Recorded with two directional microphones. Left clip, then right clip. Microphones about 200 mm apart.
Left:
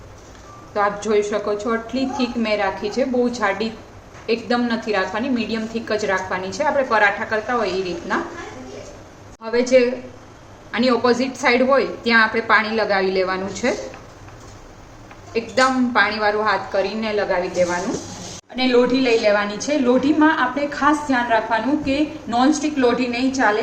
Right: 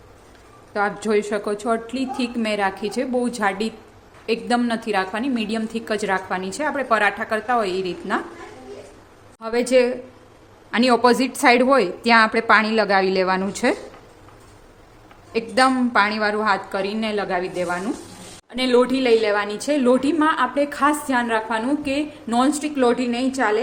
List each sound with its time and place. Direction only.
0.7 s a woman's voice: 50° right (ahead or behind)
9.4 s a woman's voice: 60° right (ahead or behind)
15.3 s a woman's voice: 60° right (ahead or behind)